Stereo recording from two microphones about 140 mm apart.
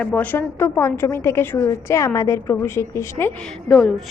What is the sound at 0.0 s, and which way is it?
A woman's voice, 10° left (ahead or behind).